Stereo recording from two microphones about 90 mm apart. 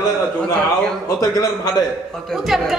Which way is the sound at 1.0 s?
45° left (ahead or behind).